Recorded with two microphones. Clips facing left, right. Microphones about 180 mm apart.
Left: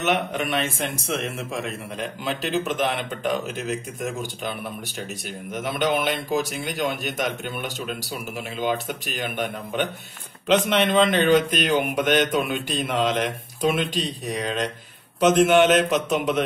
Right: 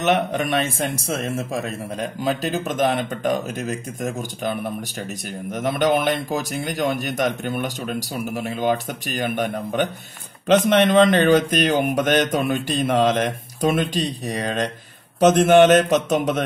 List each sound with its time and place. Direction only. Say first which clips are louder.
0.0 s speech: right 4 dB; 40° right (ahead or behind)